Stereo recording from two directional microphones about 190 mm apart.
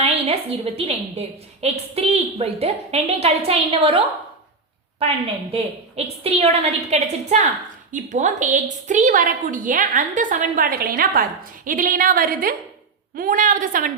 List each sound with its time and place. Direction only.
0.0 s a woman's voice: 30° right (ahead or behind)